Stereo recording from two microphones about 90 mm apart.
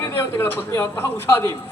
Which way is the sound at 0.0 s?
25° left (ahead or behind).